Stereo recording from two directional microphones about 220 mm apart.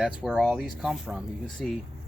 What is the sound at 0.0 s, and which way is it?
Speech, 5° right (ahead or behind).